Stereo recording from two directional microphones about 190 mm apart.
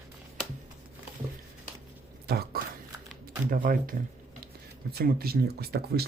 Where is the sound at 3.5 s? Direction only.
45° right (ahead or behind).